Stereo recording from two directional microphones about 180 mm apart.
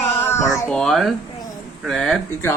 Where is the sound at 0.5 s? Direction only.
15° left (ahead or behind).